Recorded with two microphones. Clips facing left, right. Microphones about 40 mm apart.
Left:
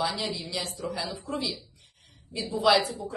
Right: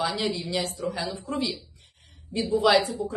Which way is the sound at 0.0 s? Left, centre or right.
Centre.